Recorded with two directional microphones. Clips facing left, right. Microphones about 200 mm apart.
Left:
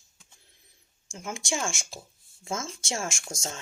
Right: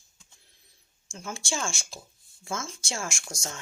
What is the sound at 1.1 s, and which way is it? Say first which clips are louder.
Speech: left 2 dB; 20° left (ahead or behind).